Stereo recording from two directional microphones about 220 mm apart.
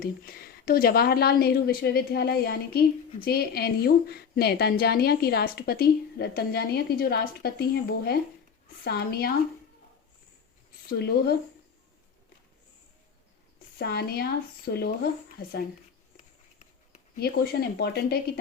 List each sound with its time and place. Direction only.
0.0 s a woman's voice: 45° left (ahead or behind)
10.8 s a woman's voice: 45° left (ahead or behind)
13.7 s a woman's voice: 45° left (ahead or behind)
17.2 s a woman's voice: 45° left (ahead or behind)